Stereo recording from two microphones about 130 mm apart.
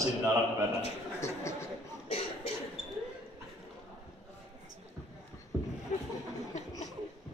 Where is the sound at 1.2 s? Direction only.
20° left (ahead or behind).